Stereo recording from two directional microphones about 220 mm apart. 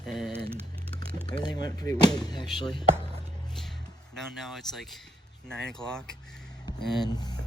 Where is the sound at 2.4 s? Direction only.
Centre (ahead or behind).